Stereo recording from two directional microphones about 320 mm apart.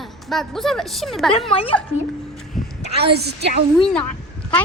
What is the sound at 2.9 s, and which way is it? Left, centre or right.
Speech, right.